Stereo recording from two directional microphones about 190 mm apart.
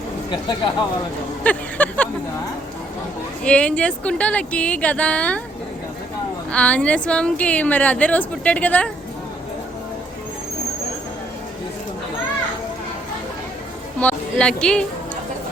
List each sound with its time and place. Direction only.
0.3 s speech: 25° left (ahead or behind)
1.5 s a sound: 10° left (ahead or behind)
3.4 s a woman's voice: 5° left (ahead or behind)
6.5 s a woman's voice: 5° left (ahead or behind)
14.0 s speech: 5° left (ahead or behind)